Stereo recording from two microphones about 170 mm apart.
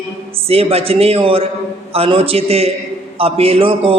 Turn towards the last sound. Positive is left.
turn(degrees=-30)  # may be behind; listen again after turning